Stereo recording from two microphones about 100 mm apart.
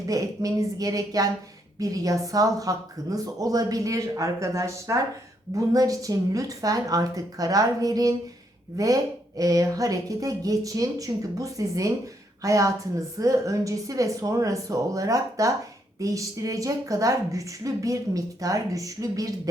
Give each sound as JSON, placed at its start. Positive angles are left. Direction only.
{"t": 0.1, "sound": "a woman's voice", "side_deg": -35}